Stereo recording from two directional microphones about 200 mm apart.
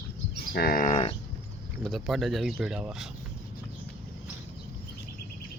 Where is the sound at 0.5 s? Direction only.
50° left (ahead or behind).